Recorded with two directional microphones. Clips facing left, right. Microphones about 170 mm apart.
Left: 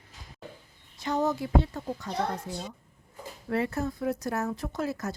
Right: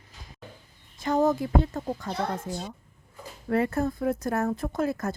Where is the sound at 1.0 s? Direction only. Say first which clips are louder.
Right 4 dB; 50° right (ahead or behind).